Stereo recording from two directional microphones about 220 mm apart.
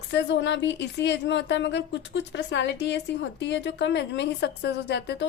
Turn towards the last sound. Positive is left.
turn(degrees=50)  # may be behind; listen again after turning